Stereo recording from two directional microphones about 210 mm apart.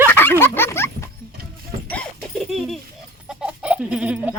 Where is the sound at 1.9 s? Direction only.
5° left (ahead or behind).